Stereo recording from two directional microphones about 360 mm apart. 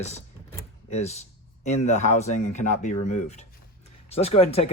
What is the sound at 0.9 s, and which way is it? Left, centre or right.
Speech, centre.